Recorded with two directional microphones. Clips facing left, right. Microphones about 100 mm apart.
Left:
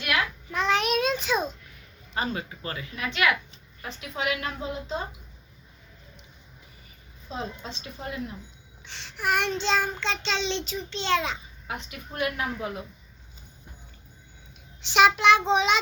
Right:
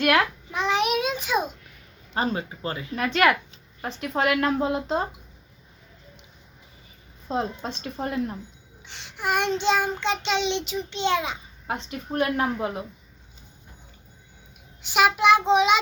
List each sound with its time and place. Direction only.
0.0 s a child's voice: 55° right (ahead or behind)
0.5 s child singing: 15° right (ahead or behind)
2.1 s a woman's voice: 30° right (ahead or behind)
2.9 s a woman's voice: 45° right (ahead or behind)
7.3 s a woman's voice: 50° right (ahead or behind)
8.8 s child singing: 15° right (ahead or behind)
11.7 s a woman's voice: 35° right (ahead or behind)
14.8 s child singing: 10° right (ahead or behind)